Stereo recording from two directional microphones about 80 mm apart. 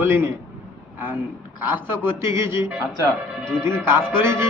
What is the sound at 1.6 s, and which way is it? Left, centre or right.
A man's voice, right.